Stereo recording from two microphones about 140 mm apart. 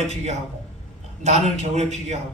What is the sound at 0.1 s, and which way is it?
A man's voice, 50° right (ahead or behind).